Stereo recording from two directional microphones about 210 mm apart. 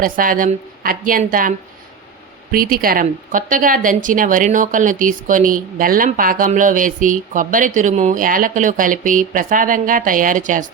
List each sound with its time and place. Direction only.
0.0 s speech: 40° right (ahead or behind)